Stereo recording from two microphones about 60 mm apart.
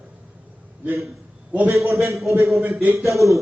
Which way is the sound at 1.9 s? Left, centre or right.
Right.